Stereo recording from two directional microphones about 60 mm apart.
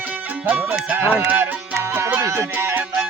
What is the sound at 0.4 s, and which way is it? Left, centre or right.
Speech, right.